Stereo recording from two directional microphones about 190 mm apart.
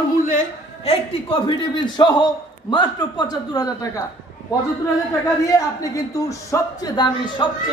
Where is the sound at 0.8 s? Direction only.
30° left (ahead or behind).